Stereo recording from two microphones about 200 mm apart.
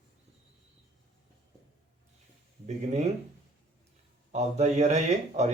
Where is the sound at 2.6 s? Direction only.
35° right (ahead or behind).